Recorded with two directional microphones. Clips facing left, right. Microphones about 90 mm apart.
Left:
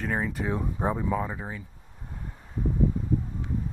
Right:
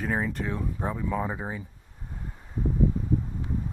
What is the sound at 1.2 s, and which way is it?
Speech, 20° right (ahead or behind).